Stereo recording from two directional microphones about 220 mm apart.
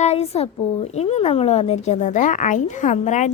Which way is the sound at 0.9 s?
30° left (ahead or behind).